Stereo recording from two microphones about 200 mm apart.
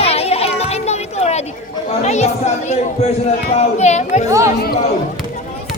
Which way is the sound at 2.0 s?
35° left (ahead or behind).